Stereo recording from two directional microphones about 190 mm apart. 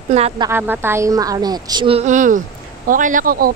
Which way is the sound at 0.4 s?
10° right (ahead or behind).